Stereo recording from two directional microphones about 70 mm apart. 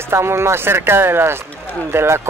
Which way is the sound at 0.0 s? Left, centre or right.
Right.